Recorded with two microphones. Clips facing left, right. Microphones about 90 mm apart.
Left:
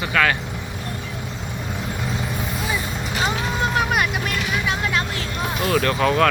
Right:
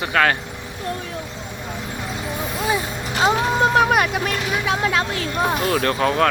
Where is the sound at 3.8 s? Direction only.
40° right (ahead or behind).